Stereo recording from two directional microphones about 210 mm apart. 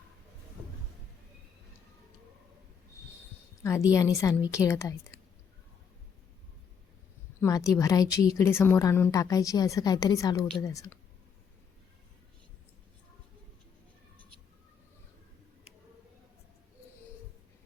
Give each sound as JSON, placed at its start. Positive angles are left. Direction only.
{"t": 3.6, "sound": "a woman's voice", "side_deg": 15}
{"t": 7.4, "sound": "a woman's voice", "side_deg": 15}